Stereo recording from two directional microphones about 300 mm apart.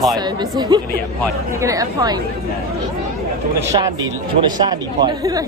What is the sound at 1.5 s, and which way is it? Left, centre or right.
Speech, centre.